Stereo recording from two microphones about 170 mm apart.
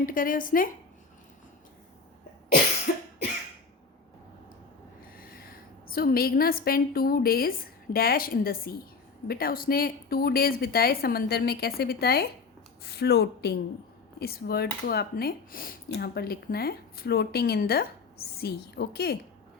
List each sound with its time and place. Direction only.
0.0 s a woman's voice: 55° left (ahead or behind)
2.5 s cough: 60° left (ahead or behind)
5.1 s a sound: 60° left (ahead or behind)
5.9 s a woman's voice: 60° left (ahead or behind)